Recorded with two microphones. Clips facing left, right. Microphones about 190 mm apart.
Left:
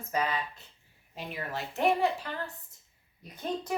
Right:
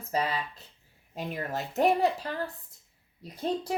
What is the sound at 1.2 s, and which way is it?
Speech, 45° right (ahead or behind).